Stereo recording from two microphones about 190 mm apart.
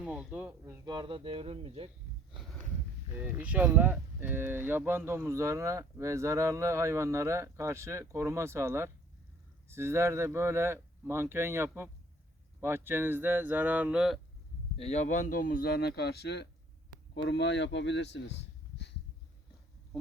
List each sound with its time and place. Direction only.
0.0 s speech: 5° right (ahead or behind); by 1.9 s 30° right (ahead or behind)
3.1 s speech: 10° right (ahead or behind)
14.8 s speech: 35° left (ahead or behind); by 18.3 s 65° left (ahead or behind)